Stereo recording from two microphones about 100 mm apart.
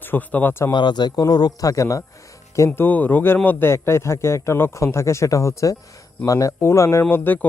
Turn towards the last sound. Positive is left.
turn(degrees=20)  # may be behind; listen again after turning